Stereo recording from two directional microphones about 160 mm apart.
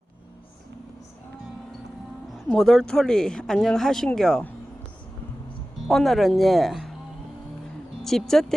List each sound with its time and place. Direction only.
2.5 s speech: centre (ahead or behind)
5.9 s speech: centre (ahead or behind)
8.0 s speech: centre (ahead or behind)